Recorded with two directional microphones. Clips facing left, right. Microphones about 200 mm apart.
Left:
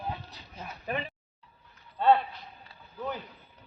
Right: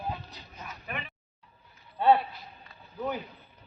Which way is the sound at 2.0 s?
15° right (ahead or behind).